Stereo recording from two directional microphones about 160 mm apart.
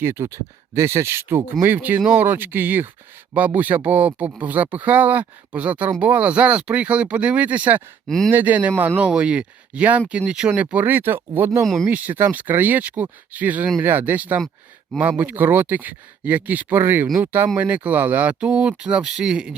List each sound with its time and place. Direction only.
0.0 s speech: 15° right (ahead or behind)
8.0 s speech: 5° left (ahead or behind)
8.3 s speech: 10° right (ahead or behind)
11.6 s speech: centre (ahead or behind)
11.9 s speech: 10° right (ahead or behind)